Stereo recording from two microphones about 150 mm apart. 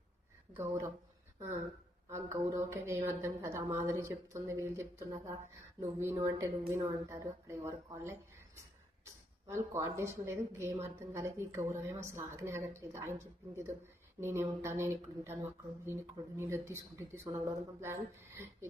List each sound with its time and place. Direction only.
0.5 s speech: 15° right (ahead or behind)
2.0 s a woman's voice: 20° right (ahead or behind)